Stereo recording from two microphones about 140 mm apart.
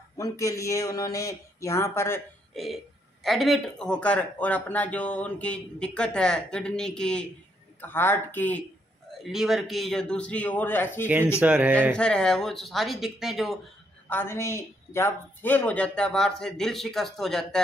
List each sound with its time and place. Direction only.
0.2 s a man's voice: 20° left (ahead or behind)
2.5 s a man's voice: centre (ahead or behind)
9.2 s a man's voice: centre (ahead or behind); by 11.1 s 15° left (ahead or behind)
11.4 s speech: 10° right (ahead or behind)
11.9 s speech: 5° left (ahead or behind)
14.0 s a man's voice: 15° left (ahead or behind)